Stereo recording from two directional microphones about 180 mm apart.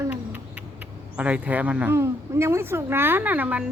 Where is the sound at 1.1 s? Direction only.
5° right (ahead or behind).